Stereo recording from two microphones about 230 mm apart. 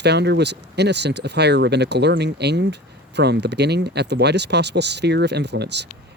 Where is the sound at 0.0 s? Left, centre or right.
Right.